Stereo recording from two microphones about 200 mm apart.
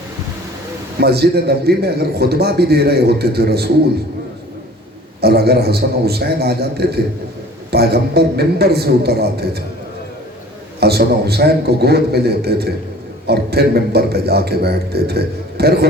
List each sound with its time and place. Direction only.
0.9 s a man's voice: 55° right (ahead or behind)
5.2 s a man's voice: 55° right (ahead or behind)
10.8 s a man's voice: 55° right (ahead or behind)